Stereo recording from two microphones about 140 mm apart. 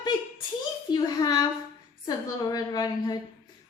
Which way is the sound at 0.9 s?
30° left (ahead or behind).